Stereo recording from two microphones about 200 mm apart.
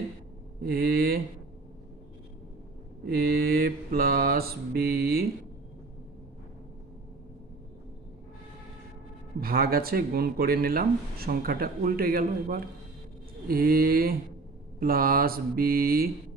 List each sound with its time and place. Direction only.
0.7 s speech: 50° right (ahead or behind)
3.1 s speech: 50° right (ahead or behind)
9.4 s speech: 50° right (ahead or behind)